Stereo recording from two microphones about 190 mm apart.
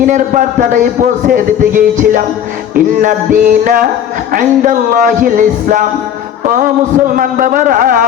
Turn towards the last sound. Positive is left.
turn(degrees=-45)  # may be behind; listen again after turning